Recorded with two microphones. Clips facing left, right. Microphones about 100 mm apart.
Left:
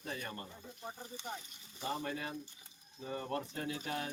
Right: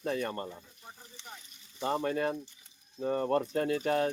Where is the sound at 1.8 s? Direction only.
55° right (ahead or behind).